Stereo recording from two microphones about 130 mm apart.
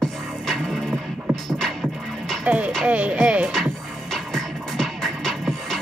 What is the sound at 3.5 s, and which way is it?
Music, centre (ahead or behind).